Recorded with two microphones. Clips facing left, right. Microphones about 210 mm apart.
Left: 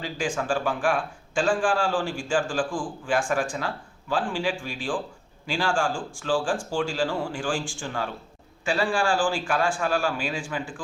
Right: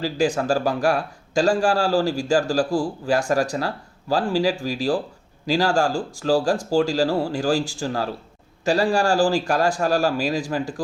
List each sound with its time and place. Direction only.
0.0 s a man's voice: 40° right (ahead or behind)